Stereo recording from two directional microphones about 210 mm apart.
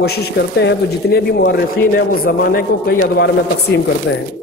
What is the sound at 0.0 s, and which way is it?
Speech, 50° left (ahead or behind).